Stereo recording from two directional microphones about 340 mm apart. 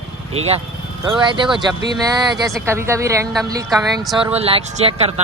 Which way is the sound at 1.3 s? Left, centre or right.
Centre.